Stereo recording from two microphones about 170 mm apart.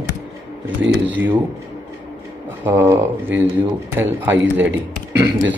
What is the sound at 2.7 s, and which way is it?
A man's voice, 15° right (ahead or behind).